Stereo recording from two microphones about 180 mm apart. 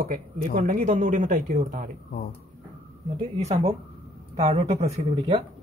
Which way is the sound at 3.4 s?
35° right (ahead or behind).